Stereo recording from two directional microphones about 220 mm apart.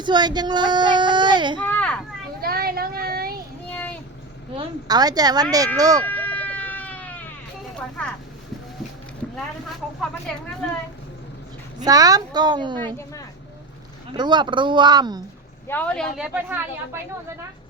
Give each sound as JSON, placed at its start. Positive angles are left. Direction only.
{"t": 0.0, "sound": "speech", "side_deg": -20}
{"t": 1.6, "sound": "children playing", "side_deg": 5}
{"t": 2.4, "sound": "speech", "side_deg": -45}
{"t": 3.7, "sound": "a sound", "side_deg": 5}
{"t": 4.5, "sound": "speech", "side_deg": -20}
{"t": 6.1, "sound": "emergency vehicle", "side_deg": 10}
{"t": 8.0, "sound": "a woman's voice", "side_deg": 5}
{"t": 9.3, "sound": "a woman's voice", "side_deg": 5}
{"t": 11.9, "sound": "speech", "side_deg": -15}
{"t": 14.2, "sound": "speech", "side_deg": -20}
{"t": 15.6, "sound": "a woman's voice", "side_deg": 10}